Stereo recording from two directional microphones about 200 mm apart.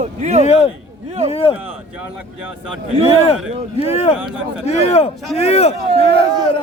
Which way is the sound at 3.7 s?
30° left (ahead or behind).